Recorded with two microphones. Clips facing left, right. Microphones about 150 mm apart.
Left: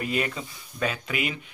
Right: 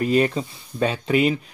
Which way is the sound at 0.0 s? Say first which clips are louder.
Right 9 dB; 35° right (ahead or behind).